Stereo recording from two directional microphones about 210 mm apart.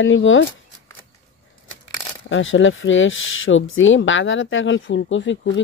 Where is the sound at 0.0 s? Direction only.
65° left (ahead or behind).